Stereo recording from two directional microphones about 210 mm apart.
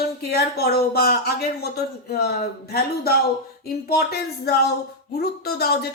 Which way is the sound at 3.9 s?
50° left (ahead or behind).